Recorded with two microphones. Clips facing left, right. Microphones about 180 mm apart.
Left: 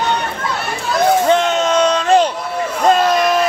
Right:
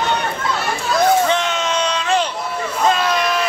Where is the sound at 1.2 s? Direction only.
45° left (ahead or behind).